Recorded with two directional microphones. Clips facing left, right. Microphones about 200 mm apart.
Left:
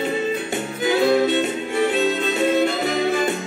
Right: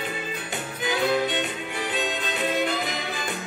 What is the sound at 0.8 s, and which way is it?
Music, 25° left (ahead or behind).